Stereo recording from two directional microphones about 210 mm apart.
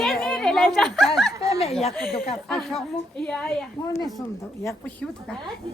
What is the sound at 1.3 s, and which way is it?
Speech, 15° right (ahead or behind).